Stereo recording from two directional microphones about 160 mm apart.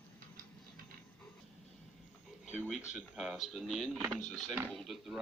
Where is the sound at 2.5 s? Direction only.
5° right (ahead or behind).